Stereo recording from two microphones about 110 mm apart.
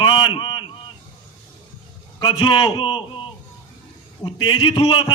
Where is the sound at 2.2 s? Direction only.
50° left (ahead or behind).